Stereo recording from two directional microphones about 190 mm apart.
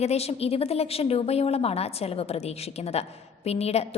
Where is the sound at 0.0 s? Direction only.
35° left (ahead or behind).